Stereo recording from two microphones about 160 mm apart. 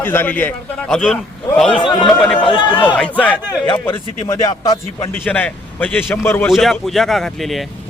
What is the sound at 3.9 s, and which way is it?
A man's voice, 20° left (ahead or behind).